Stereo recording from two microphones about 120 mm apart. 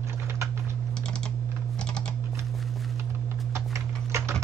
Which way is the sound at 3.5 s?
25° right (ahead or behind).